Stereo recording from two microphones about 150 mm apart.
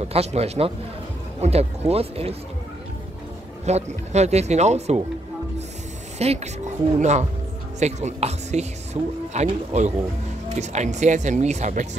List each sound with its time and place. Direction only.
0.1 s speech: 45° right (ahead or behind)
3.6 s speech: 45° right (ahead or behind)
6.1 s speech: 45° right (ahead or behind)